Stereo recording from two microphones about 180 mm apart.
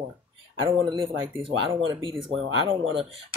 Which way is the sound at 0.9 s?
30° right (ahead or behind).